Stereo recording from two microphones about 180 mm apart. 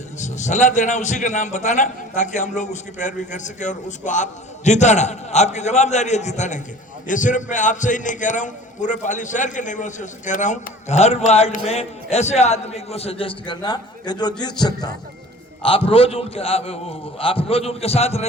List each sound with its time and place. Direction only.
0.2 s a man's voice: 40° left (ahead or behind)